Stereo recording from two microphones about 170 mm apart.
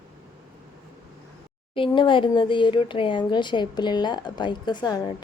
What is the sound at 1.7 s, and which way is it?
Speech, 30° left (ahead or behind).